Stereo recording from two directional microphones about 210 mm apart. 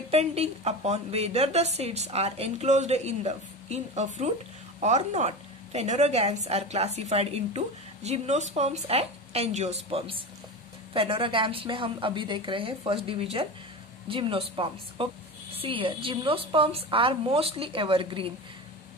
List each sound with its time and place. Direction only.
0.1 s a woman's voice: 30° right (ahead or behind)